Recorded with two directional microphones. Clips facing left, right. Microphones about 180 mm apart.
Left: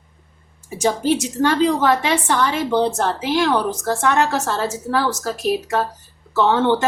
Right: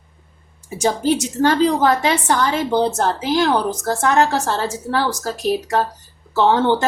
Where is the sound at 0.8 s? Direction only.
40° right (ahead or behind).